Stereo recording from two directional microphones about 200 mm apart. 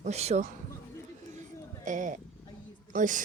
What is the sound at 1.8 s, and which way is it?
Speech, 40° right (ahead or behind).